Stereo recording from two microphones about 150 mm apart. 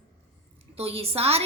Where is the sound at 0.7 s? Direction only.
40° right (ahead or behind).